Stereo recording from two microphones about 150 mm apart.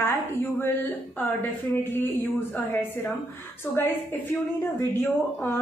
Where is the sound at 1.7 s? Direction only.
15° left (ahead or behind).